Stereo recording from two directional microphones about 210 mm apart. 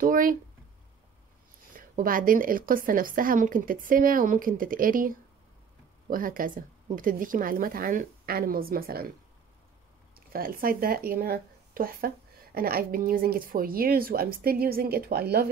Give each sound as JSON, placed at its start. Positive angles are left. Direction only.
{"t": 0.0, "sound": "speech", "side_deg": -40}
{"t": 1.8, "sound": "speech", "side_deg": -40}
{"t": 10.3, "sound": "speech", "side_deg": -45}